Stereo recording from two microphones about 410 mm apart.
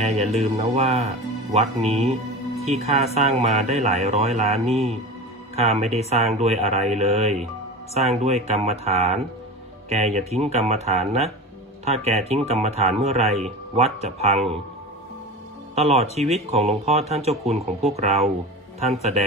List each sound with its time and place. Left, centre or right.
0.0 s speech: centre
5.6 s speech: centre
15.7 s speech: centre